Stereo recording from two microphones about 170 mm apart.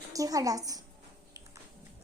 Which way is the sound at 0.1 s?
20° right (ahead or behind).